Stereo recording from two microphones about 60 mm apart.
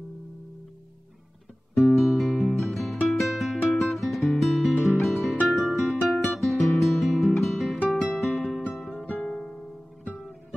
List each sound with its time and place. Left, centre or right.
2.0 s music: centre
6.0 s guitar: centre
7.9 s music: centre
9.0 s music: left